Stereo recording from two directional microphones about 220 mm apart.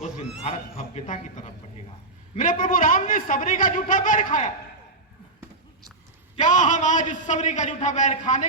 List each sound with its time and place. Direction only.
0.4 s a man's voice: 35° left (ahead or behind)
2.3 s a man's voice: 35° left (ahead or behind)
6.3 s a man's voice: 35° left (ahead or behind)